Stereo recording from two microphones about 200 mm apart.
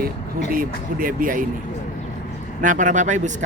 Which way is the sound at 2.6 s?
40° right (ahead or behind).